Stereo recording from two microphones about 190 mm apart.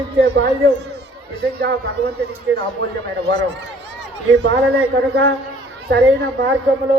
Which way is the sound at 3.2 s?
65° right (ahead or behind).